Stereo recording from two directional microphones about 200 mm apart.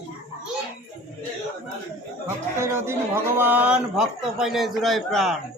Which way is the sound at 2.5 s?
15° right (ahead or behind).